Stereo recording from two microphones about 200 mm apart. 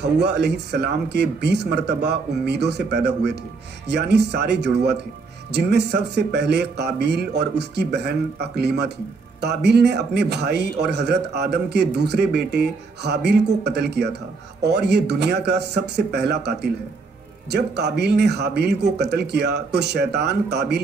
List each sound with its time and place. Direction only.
0.0 s a man's voice: 55° right (ahead or behind)